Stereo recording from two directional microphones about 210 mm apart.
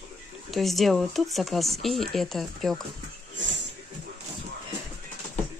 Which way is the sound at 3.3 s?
60° right (ahead or behind).